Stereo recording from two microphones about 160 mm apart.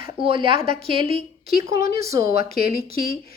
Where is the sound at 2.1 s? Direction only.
25° right (ahead or behind).